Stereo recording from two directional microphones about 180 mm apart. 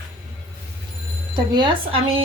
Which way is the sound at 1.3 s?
25° right (ahead or behind).